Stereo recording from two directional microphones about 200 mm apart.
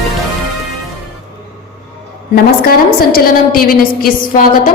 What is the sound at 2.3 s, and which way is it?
A woman's voice, 50° left (ahead or behind).